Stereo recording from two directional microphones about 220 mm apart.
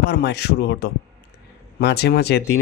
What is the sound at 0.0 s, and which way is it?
Speech, 50° left (ahead or behind).